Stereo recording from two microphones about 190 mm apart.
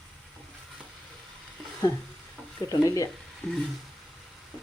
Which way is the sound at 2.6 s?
15° left (ahead or behind).